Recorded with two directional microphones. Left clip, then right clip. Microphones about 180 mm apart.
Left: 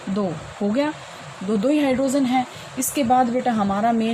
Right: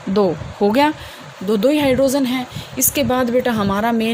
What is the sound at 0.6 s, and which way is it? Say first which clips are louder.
Speech: right 8 dB; 60° right (ahead or behind).